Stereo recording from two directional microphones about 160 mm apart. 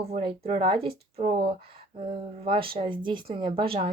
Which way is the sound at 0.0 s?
40° right (ahead or behind).